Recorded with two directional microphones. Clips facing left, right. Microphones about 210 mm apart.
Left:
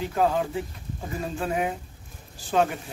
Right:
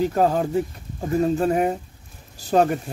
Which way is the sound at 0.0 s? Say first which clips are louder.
Right 4 dB; 40° right (ahead or behind).